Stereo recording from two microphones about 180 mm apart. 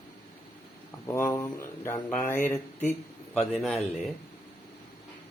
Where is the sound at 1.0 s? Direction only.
15° left (ahead or behind).